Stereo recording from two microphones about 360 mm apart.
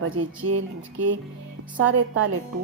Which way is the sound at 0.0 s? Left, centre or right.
Right.